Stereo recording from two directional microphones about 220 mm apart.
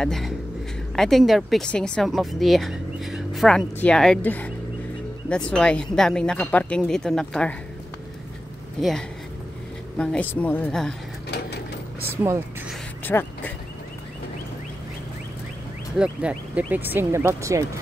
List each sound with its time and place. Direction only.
0.0 s speech: centre (ahead or behind)
9.9 s speech: 5° left (ahead or behind)
11.2 s sewing machine: 50° left (ahead or behind)
12.0 s vehicle: 10° right (ahead or behind)
13.0 s a sound: 10° left (ahead or behind)
16.0 s speech: 5° right (ahead or behind)